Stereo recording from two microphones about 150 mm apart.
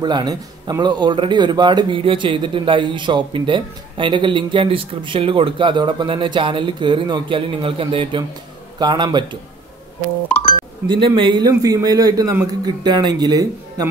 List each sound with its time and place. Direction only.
0.0 s a man's voice: 30° right (ahead or behind)
10.9 s a man's voice: 35° right (ahead or behind)